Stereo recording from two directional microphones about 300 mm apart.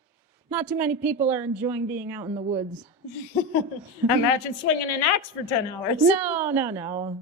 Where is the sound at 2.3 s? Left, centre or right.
Centre.